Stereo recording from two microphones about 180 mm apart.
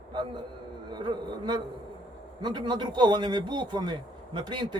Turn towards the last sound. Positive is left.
turn(degrees=-25)  # may be behind; listen again after turning